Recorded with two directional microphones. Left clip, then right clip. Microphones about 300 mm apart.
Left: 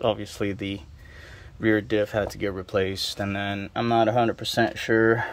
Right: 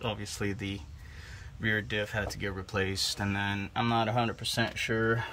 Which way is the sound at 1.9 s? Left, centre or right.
Centre.